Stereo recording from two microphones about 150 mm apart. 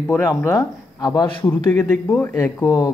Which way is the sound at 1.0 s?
30° left (ahead or behind).